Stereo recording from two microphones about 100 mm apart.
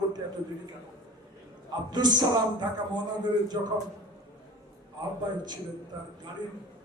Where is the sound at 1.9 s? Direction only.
45° right (ahead or behind).